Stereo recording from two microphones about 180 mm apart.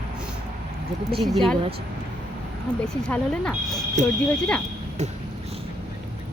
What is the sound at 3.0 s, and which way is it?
Speech, 5° left (ahead or behind).